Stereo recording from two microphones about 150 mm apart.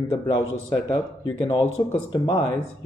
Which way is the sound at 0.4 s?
25° left (ahead or behind).